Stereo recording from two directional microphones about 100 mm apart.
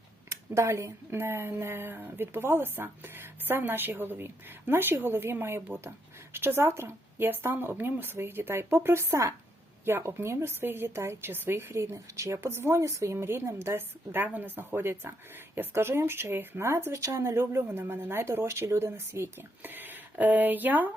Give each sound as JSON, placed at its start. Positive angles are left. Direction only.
{"t": 0.5, "sound": "a woman's voice", "side_deg": -30}